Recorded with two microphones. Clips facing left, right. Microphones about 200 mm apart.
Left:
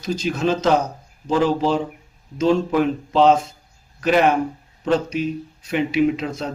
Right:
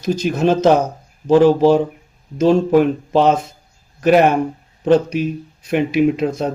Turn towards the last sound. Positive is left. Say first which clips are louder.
# right 4 dB
turn(degrees=-55)  # may be behind; listen again after turning